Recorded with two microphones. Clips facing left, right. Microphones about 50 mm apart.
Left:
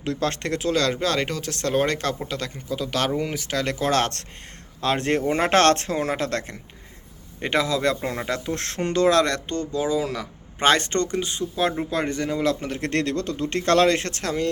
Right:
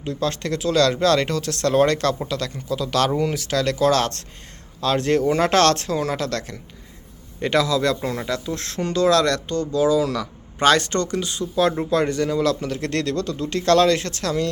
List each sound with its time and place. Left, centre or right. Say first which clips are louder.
0.0 s speech: even; left
0.3 s speech: right 3 dB; left
0.8 s speech: right 8 dB; centre
8.4 s speech: even; left